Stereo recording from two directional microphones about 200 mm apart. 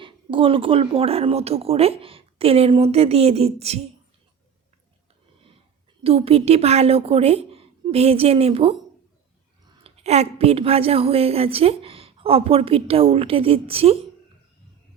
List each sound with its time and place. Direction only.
0.0 s a woman's voice: 25° right (ahead or behind)
6.0 s a woman's voice: 30° right (ahead or behind)
9.8 s a woman's voice: 30° right (ahead or behind)